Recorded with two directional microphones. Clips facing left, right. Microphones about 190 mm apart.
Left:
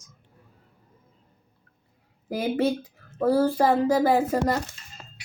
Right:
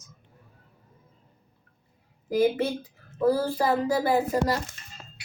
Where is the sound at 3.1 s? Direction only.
50° left (ahead or behind).